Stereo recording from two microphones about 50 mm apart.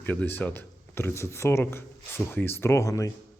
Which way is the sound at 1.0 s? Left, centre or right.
Left.